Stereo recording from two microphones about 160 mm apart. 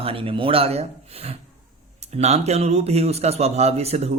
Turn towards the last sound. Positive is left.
turn(degrees=-40)  # may be behind; listen again after turning